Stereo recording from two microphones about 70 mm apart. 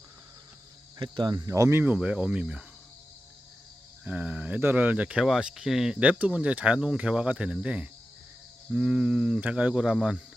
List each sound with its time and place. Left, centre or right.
1.4 s speech: right
1.7 s speech: right
4.0 s speech: centre
5.2 s speech: centre
6.0 s speech: centre